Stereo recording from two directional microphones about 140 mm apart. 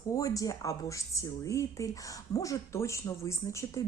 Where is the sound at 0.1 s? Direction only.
25° left (ahead or behind).